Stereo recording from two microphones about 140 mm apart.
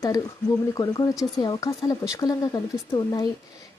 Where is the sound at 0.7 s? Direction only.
25° left (ahead or behind).